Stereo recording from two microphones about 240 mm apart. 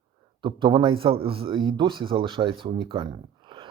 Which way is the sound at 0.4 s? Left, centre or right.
Centre.